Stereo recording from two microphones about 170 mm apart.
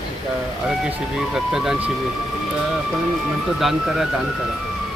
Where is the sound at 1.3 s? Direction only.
Centre (ahead or behind).